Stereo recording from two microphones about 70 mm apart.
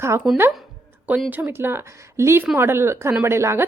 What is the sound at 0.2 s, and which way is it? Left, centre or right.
Speech, centre.